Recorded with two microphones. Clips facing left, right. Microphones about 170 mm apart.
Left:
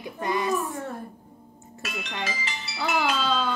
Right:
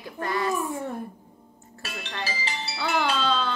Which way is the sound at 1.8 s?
30° right (ahead or behind).